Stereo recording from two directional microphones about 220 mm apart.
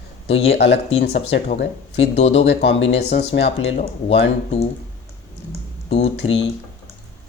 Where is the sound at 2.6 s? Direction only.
55° left (ahead or behind).